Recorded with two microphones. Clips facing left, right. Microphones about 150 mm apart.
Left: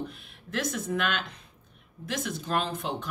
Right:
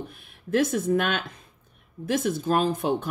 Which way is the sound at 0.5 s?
50° right (ahead or behind).